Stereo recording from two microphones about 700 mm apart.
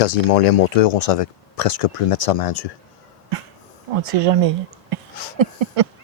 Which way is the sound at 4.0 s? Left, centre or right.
Right.